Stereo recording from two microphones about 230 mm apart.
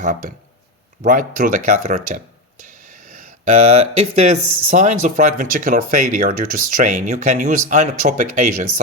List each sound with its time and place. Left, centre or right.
0.0 s speech: right